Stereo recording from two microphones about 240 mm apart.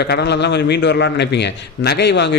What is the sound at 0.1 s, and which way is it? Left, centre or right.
A man's voice, left.